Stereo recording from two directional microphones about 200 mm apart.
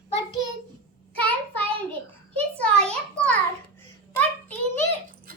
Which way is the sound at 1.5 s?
5° left (ahead or behind).